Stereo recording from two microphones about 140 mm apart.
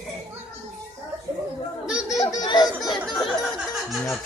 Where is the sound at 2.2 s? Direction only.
35° left (ahead or behind).